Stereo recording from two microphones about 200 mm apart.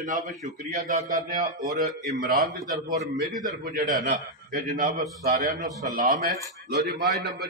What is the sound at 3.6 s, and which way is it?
A man's voice, 50° right (ahead or behind).